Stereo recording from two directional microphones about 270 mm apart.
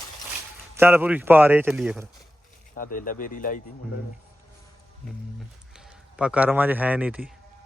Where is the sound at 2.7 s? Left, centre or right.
Left.